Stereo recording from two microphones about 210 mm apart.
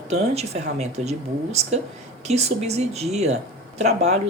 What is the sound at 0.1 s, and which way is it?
Speech, 30° right (ahead or behind).